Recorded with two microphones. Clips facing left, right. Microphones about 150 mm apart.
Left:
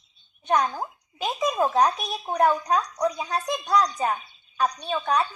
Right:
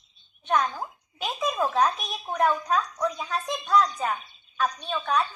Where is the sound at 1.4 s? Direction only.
35° left (ahead or behind).